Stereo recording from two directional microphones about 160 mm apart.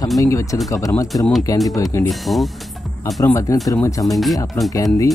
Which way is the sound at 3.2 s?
20° left (ahead or behind).